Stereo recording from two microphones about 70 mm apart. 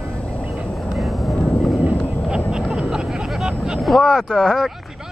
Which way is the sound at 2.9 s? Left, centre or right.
Centre.